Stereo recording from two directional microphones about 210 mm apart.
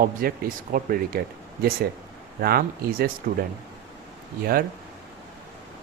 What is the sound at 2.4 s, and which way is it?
Speech, 45° right (ahead or behind).